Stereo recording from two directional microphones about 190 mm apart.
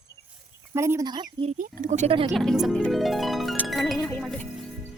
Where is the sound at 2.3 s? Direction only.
Centre (ahead or behind).